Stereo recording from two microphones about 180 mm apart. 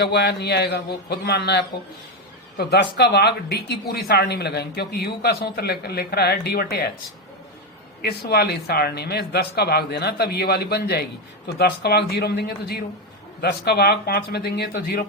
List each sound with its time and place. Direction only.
0.0 s a man's voice: 65° left (ahead or behind)
8.0 s a woman's voice: 60° left (ahead or behind)